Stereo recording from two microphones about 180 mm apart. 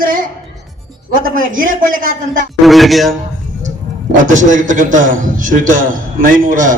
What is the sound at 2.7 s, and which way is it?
Music, centre (ahead or behind).